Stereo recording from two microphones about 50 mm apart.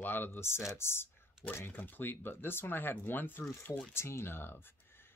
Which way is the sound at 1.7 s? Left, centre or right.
Left.